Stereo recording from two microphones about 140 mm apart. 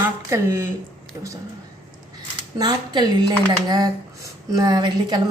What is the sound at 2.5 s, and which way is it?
A woman's voice, 30° right (ahead or behind).